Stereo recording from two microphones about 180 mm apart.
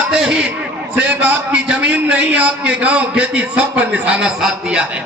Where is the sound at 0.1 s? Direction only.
5° right (ahead or behind).